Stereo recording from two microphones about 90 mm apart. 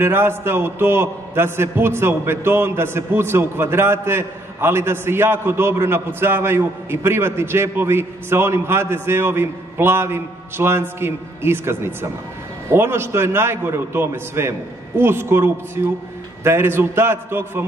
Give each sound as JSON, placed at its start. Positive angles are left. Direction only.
{"t": 0.0, "sound": "a man's voice", "side_deg": -25}